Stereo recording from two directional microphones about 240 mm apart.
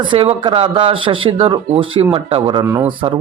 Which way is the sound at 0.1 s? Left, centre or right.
Right.